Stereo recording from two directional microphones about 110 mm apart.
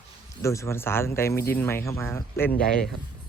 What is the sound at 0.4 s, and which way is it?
Speech, 25° left (ahead or behind).